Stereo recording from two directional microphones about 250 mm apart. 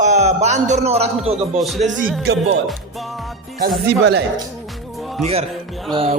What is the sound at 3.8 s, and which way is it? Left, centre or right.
Speech, right.